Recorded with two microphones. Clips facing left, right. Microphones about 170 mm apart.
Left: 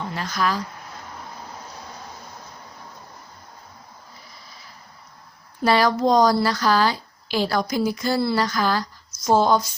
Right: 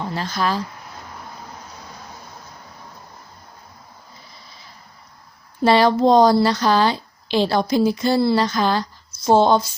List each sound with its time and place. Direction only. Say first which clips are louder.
0.0 s speech: right 2 dB; 30° right (ahead or behind)
5.6 s a woman's voice: right 4 dB; 25° right (ahead or behind)